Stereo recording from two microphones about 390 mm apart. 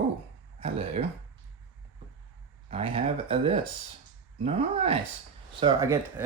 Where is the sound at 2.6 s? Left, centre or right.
Centre.